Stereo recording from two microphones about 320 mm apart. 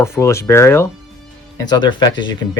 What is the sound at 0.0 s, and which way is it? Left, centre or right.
Speech, centre.